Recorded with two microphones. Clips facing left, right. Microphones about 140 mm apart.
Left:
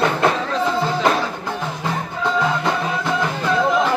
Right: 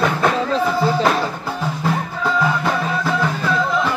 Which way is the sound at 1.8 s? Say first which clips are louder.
Right 2 dB; 5° right (ahead or behind).